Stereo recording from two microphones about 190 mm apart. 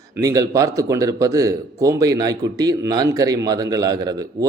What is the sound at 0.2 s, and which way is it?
A man's voice, 20° right (ahead or behind).